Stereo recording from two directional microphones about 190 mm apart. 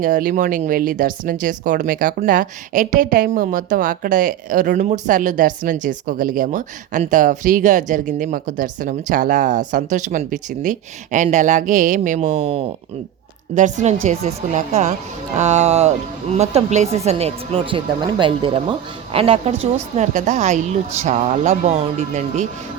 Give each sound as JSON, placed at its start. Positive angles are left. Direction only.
{"t": 0.0, "sound": "a woman's voice", "side_deg": -45}